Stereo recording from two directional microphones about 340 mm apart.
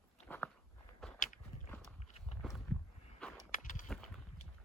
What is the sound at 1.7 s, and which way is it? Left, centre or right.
Horse, centre.